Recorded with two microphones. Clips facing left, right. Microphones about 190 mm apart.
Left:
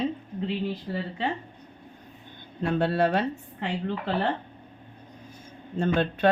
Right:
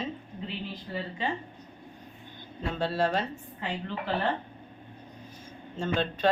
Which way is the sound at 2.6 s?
60° left (ahead or behind).